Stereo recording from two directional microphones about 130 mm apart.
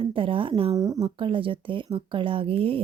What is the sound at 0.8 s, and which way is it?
Speech, 30° right (ahead or behind).